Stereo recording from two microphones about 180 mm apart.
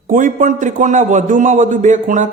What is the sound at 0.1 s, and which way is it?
A man's voice, 50° right (ahead or behind).